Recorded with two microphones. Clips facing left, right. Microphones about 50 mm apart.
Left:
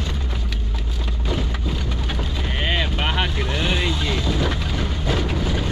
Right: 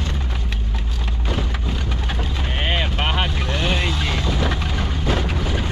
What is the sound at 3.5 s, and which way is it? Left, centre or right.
Vehicle, centre.